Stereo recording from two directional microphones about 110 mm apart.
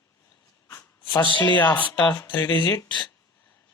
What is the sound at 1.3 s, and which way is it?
Speech, 45° left (ahead or behind).